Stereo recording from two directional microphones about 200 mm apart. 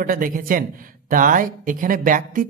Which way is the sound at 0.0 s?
45° right (ahead or behind).